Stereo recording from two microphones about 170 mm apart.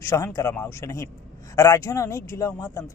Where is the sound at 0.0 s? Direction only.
15° left (ahead or behind).